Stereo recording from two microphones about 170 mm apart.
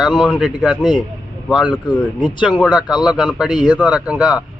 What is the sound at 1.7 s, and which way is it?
Speech, 25° left (ahead or behind).